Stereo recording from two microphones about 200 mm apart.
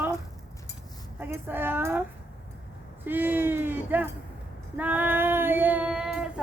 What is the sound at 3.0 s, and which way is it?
Speech, 10° right (ahead or behind).